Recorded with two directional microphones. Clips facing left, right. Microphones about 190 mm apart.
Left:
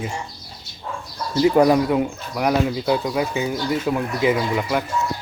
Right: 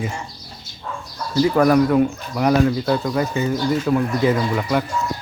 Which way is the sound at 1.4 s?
20° left (ahead or behind).